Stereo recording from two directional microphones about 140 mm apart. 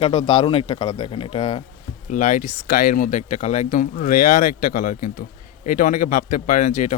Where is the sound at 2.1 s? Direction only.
70° left (ahead or behind).